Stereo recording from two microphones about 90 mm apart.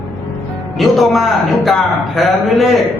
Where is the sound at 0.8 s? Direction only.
Centre (ahead or behind).